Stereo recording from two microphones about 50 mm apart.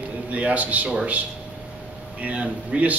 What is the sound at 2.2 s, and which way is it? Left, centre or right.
Speech, right.